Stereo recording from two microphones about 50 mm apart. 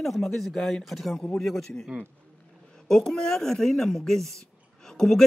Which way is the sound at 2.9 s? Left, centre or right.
Centre.